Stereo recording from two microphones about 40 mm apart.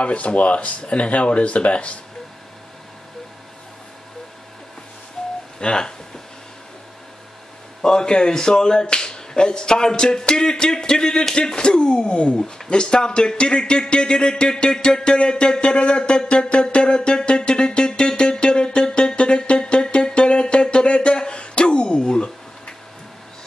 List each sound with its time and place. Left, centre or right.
0.0 s speech: left
5.2 s telephone dialing: centre
5.6 s speech: centre
7.8 s speech: centre
12.4 s a sound: centre